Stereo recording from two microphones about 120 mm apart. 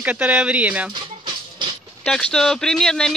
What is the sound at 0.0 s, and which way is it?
Speech, 15° right (ahead or behind).